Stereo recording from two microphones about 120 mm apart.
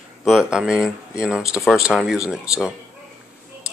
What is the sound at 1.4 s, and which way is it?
Speech, 25° left (ahead or behind).